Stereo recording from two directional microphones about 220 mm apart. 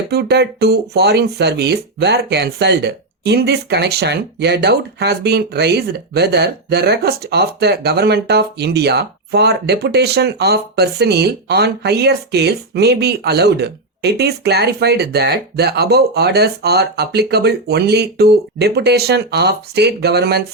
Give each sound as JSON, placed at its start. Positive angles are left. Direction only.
{"t": 0.1, "sound": "speech", "side_deg": -50}